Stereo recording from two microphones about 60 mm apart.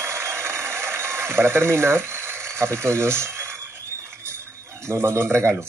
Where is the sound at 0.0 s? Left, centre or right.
Right.